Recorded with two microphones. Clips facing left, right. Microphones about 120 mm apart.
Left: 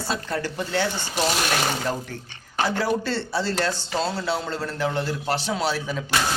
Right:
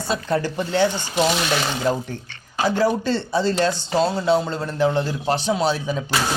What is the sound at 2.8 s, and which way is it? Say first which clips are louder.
Speech: right 4 dB; 15° right (ahead or behind).